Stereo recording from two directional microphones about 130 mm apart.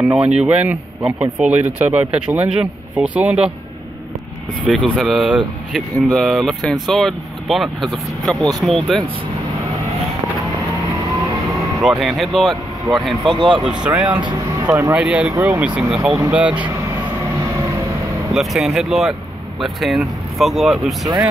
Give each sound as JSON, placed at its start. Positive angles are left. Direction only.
{"t": 0.0, "sound": "speech", "side_deg": -10}
{"t": 4.6, "sound": "speech", "side_deg": 5}
{"t": 12.0, "sound": "speech", "side_deg": 0}
{"t": 13.3, "sound": "speech", "side_deg": -35}
{"t": 13.7, "sound": "speech", "side_deg": -10}
{"t": 14.2, "sound": "speech", "side_deg": -30}
{"t": 15.0, "sound": "speech", "side_deg": -10}
{"t": 18.3, "sound": "speech", "side_deg": 0}